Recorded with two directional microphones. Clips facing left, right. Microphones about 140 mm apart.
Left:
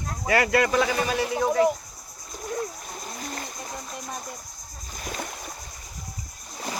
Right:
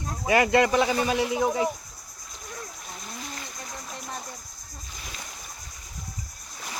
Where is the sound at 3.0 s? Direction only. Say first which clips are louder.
Left 4 dB; 45° left (ahead or behind).